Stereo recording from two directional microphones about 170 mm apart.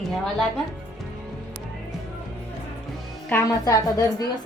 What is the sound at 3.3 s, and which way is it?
Speech, 20° left (ahead or behind).